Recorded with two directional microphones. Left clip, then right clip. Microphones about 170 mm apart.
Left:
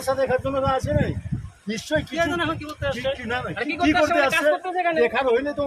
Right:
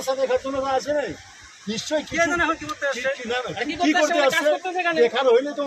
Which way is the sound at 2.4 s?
60° left (ahead or behind).